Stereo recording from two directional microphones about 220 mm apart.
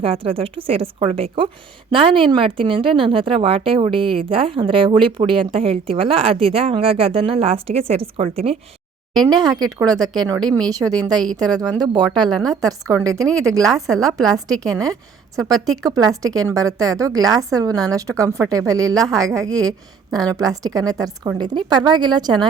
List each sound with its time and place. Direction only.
0.0 s a woman's voice: 25° right (ahead or behind)